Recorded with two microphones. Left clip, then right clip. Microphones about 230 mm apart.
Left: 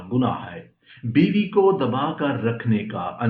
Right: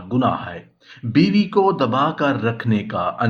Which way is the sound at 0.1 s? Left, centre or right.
Right.